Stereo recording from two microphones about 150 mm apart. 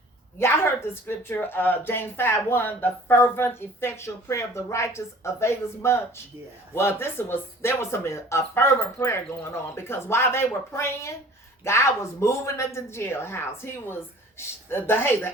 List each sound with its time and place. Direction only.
0.3 s speech: 15° left (ahead or behind)